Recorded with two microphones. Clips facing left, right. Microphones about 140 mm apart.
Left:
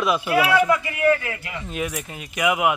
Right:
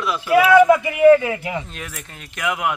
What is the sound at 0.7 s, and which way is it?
Speech, 20° right (ahead or behind).